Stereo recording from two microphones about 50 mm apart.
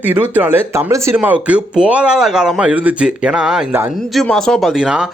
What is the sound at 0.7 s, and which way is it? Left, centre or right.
Speech, right.